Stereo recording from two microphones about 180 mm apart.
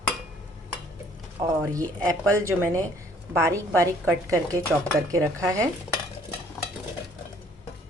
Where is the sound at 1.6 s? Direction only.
20° right (ahead or behind).